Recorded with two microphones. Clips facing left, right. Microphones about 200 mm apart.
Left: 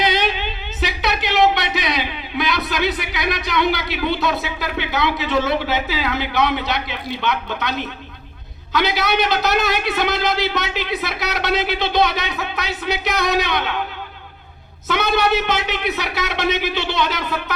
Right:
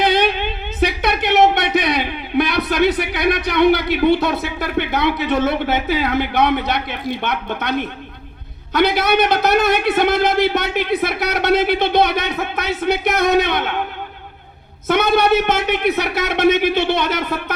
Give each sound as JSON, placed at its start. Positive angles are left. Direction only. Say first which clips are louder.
{"t": 0.0, "sound": "a sound", "louder": "right 4 dB", "side_deg": -55}
{"t": 2.6, "sound": "a man's voice", "louder": "right 6 dB", "side_deg": -55}
{"t": 14.8, "sound": "a man's voice", "louder": "right 4 dB", "side_deg": -55}